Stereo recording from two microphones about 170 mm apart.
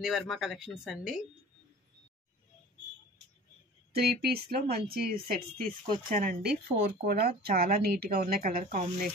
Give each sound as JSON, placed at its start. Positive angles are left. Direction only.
{"t": 0.0, "sound": "speech", "side_deg": 0}
{"t": 3.9, "sound": "speech", "side_deg": -65}
{"t": 6.8, "sound": "speech", "side_deg": -65}